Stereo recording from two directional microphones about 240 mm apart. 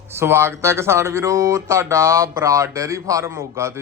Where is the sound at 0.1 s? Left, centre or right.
Centre.